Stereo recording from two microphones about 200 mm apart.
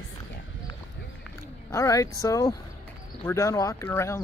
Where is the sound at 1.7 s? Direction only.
15° left (ahead or behind).